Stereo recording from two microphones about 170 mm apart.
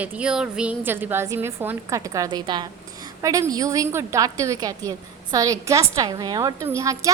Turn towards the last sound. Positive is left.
turn(degrees=-20)  # may be behind; listen again after turning